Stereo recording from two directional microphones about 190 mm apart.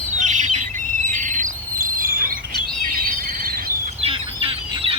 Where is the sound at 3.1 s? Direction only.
45° right (ahead or behind).